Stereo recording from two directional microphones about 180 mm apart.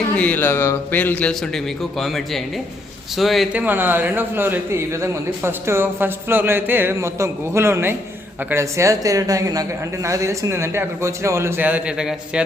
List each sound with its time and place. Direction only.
0.2 s a man's voice: 10° left (ahead or behind)